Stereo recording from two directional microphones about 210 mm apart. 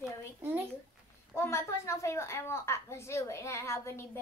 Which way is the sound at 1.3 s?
15° left (ahead or behind).